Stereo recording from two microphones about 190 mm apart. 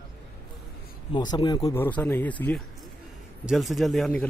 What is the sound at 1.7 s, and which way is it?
A man's voice, 10° left (ahead or behind).